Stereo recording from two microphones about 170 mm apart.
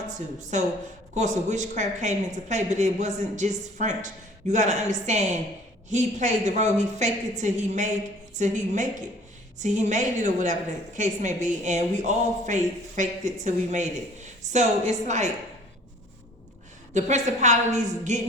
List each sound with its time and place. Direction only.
0.5 s a woman's voice: 45° right (ahead or behind)
16.9 s a woman's voice: 45° right (ahead or behind)